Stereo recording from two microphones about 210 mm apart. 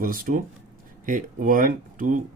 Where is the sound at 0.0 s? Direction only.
40° right (ahead or behind).